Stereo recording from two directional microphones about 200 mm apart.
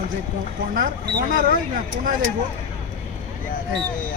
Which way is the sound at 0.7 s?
45° right (ahead or behind).